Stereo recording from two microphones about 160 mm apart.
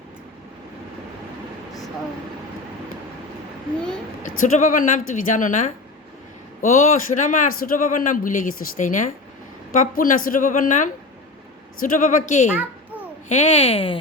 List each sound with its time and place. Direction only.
4.2 s a man's voice: 55° left (ahead or behind); by 14.0 s 35° left (ahead or behind)